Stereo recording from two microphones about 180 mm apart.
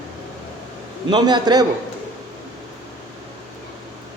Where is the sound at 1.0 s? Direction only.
25° right (ahead or behind).